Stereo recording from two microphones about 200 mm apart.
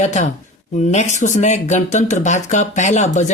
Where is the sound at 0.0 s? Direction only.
35° left (ahead or behind).